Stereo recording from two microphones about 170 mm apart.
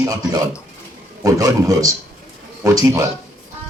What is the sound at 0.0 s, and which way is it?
Speech, 20° right (ahead or behind).